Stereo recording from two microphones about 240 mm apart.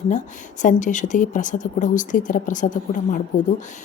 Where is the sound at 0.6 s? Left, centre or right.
Left.